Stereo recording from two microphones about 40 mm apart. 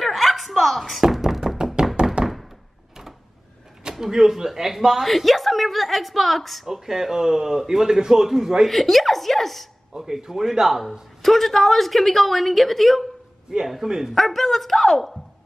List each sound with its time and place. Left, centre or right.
0.0 s a sound: centre
1.1 s knock: centre
2.2 s thunk: right
3.9 s a man's voice: centre
6.7 s a man's voice: centre
8.6 s a woman's voice: centre
9.9 s a man's voice: centre
11.2 s a woman's voice: centre
13.7 s a man's voice: centre
14.1 s a woman's voice: centre